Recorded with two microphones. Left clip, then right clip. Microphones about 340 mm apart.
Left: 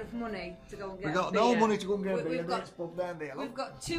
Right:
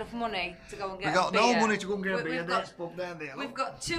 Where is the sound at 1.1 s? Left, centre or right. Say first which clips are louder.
Right 3 dB; centre.